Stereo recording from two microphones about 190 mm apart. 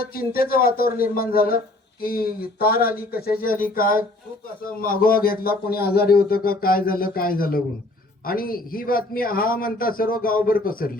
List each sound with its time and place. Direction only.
0.1 s speech: 50° left (ahead or behind)